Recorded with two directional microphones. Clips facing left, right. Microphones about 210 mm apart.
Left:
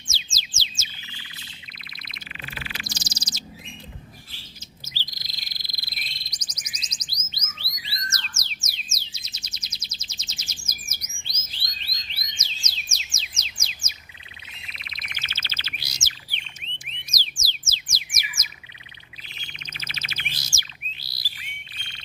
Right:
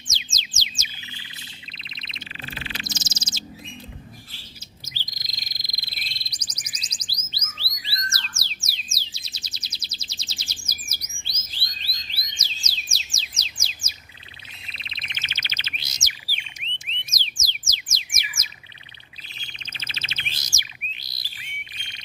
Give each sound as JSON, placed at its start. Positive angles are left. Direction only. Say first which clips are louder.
{"t": 0.1, "sound": "bird", "louder": "even", "side_deg": -20}
{"t": 5.1, "sound": "frog", "louder": "right 1 dB", "side_deg": -15}
{"t": 5.9, "sound": "a sound", "louder": "left 1 dB", "side_deg": -30}
{"t": 8.4, "sound": "music", "louder": "right 1 dB", "side_deg": -30}
{"t": 11.8, "sound": "bird", "louder": "right 1 dB", "side_deg": -35}
{"t": 16.2, "sound": "bird", "louder": "right 1 dB", "side_deg": -5}
{"t": 16.6, "sound": "alarm", "louder": "right 1 dB", "side_deg": -20}
{"t": 17.1, "sound": "music", "louder": "left 3 dB", "side_deg": -20}
{"t": 19.3, "sound": "bird", "louder": "left 2 dB", "side_deg": -30}